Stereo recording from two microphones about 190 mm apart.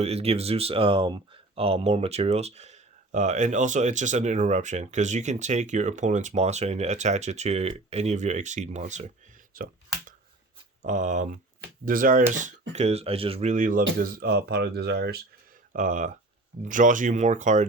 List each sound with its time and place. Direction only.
0.0 s speech: 35° right (ahead or behind)
9.5 s speech: 50° right (ahead or behind)
10.8 s speech: 40° right (ahead or behind)
14.0 s speech: 55° right (ahead or behind)
15.7 s speech: 45° right (ahead or behind)